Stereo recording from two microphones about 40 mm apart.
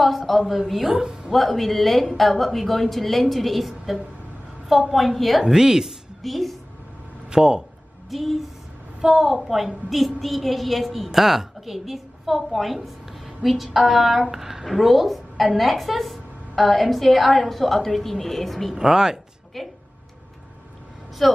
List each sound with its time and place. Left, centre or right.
0.3 s a woman's voice: centre
0.9 s a woman's voice: centre
1.3 s a woman's voice: centre
5.4 s a woman's voice: centre
6.2 s a woman's voice: centre
7.2 s speech: centre
8.1 s a woman's voice: centre
18.8 s a woman's voice: centre
19.6 s a woman's voice: centre
21.2 s a woman's voice: centre